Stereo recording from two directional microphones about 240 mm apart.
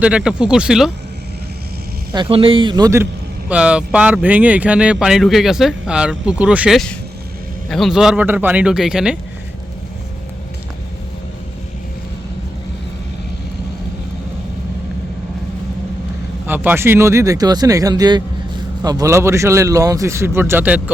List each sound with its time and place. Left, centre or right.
0.0 s speech: centre
2.1 s a man's voice: right; by 9.1 s centre
16.5 s speech: centre